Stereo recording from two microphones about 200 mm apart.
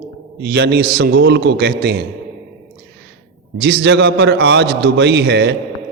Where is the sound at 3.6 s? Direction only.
55° right (ahead or behind).